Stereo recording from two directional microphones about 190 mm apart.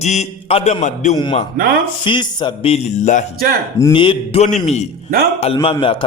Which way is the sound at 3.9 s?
25° left (ahead or behind).